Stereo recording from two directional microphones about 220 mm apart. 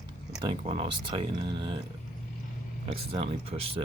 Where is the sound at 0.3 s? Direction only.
25° right (ahead or behind).